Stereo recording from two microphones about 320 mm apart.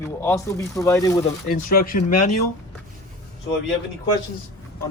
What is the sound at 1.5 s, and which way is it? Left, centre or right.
Speech, left.